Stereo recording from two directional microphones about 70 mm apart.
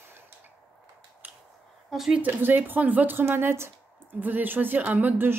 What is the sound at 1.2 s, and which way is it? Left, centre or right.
Finger snapping, right.